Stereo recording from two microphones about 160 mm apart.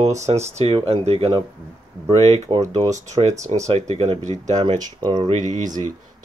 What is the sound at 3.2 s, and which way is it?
Speech, 40° right (ahead or behind).